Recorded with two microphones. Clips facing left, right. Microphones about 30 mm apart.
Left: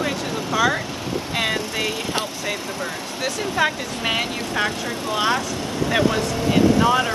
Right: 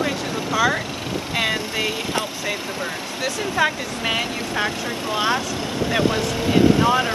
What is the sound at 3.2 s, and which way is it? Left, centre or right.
Speech, centre.